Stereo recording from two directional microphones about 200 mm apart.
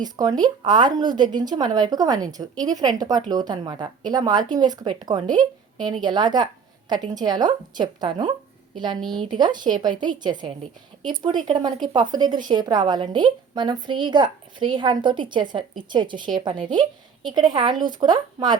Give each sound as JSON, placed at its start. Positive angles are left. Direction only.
{"t": 0.0, "sound": "speech", "side_deg": -20}
{"t": 9.0, "sound": "speech", "side_deg": 0}
{"t": 9.3, "sound": "speech", "side_deg": -20}